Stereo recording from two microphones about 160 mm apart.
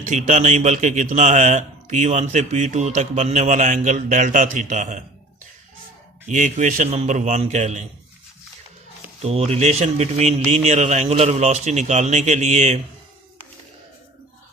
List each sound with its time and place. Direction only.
0.1 s a man's voice: 50° right (ahead or behind)
6.2 s a man's voice: 50° right (ahead or behind)
9.2 s a man's voice: 40° right (ahead or behind)